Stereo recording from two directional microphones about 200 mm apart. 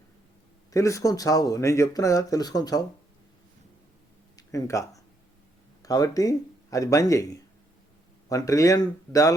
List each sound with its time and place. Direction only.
0.7 s speech: 15° left (ahead or behind)
4.4 s speech: 15° left (ahead or behind)
8.3 s speech: 15° left (ahead or behind)